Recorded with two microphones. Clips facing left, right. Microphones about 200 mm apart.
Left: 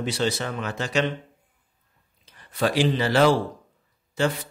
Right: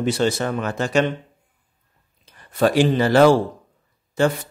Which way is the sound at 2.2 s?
50° right (ahead or behind).